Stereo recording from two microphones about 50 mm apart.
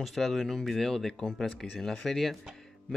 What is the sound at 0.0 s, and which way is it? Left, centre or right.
A man's voice, centre.